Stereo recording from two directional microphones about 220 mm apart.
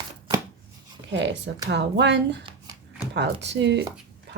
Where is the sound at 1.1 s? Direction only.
55° right (ahead or behind).